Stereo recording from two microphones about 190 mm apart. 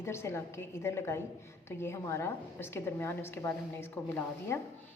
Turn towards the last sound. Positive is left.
turn(degrees=10)  # may be behind; listen again after turning